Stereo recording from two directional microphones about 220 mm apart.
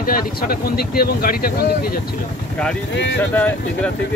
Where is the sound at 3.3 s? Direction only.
5° left (ahead or behind).